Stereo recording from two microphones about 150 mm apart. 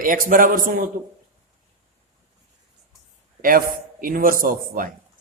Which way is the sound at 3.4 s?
70° right (ahead or behind).